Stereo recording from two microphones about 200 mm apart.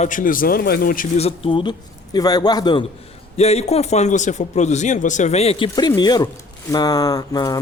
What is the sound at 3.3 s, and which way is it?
Speech, 30° left (ahead or behind).